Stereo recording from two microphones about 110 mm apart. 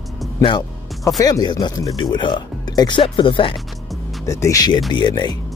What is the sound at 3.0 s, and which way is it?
Speech, 50° left (ahead or behind).